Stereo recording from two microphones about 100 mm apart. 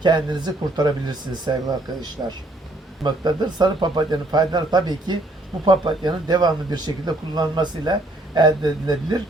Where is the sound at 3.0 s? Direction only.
45° right (ahead or behind).